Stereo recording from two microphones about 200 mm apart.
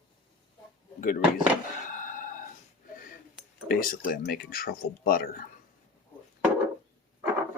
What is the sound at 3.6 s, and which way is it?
Speech, 45° left (ahead or behind).